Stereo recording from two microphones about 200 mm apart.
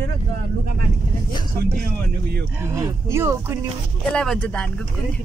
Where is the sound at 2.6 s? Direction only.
15° right (ahead or behind).